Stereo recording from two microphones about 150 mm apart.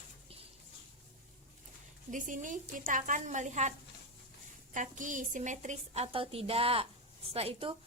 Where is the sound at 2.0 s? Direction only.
60° right (ahead or behind).